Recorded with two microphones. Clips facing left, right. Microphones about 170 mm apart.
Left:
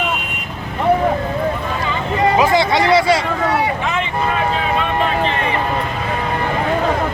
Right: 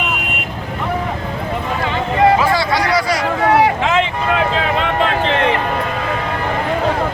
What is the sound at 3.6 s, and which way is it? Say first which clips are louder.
Boat: right 5 dB; 90° right.